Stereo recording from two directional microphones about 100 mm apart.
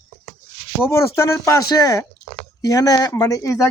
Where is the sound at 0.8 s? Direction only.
25° left (ahead or behind).